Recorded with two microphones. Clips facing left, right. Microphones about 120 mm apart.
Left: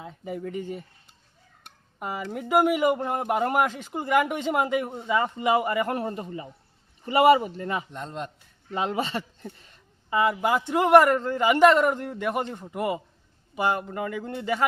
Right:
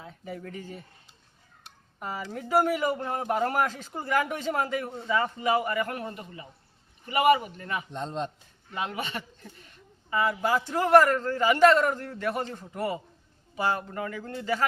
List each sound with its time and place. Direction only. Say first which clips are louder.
0.0 s a man's voice: left 5 dB; 15° left (ahead or behind)
2.0 s a man's voice: left 3 dB; 15° left (ahead or behind)
7.9 s speech: right 2 dB; 25° right (ahead or behind)
8.7 s a man's voice: left 6 dB; 30° left (ahead or behind)
10.1 s a man's voice: left 3 dB; 20° left (ahead or behind)